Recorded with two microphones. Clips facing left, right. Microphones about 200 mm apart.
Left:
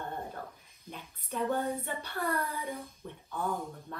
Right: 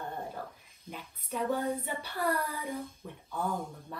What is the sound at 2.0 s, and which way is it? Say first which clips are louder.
Child singing: right 2 dB; 10° right (ahead or behind).